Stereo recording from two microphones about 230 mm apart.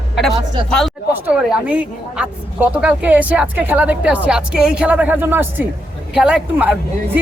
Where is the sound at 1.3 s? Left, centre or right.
Centre.